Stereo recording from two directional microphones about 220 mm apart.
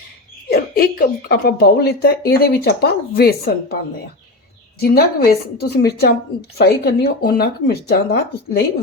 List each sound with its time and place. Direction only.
0.4 s speech: 45° left (ahead or behind)
4.8 s speech: 45° left (ahead or behind)